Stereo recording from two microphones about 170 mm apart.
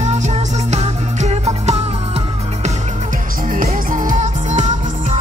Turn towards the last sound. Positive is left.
turn(degrees=-45)  # may be behind; listen again after turning